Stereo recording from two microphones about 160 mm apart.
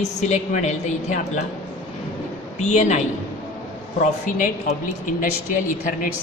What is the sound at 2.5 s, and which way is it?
A woman's voice, 45° left (ahead or behind).